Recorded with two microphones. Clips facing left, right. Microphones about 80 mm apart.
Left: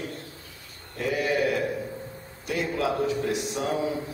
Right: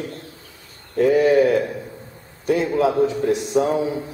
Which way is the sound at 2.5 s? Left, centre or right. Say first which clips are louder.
Right 8 dB; right.